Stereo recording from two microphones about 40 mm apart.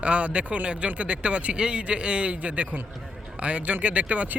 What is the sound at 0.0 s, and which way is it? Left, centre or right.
Speech, right.